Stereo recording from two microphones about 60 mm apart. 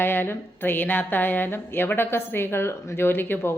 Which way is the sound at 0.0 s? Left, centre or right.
Left.